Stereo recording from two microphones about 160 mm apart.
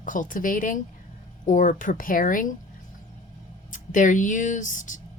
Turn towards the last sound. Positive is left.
turn(degrees=55)  # may be behind; listen again after turning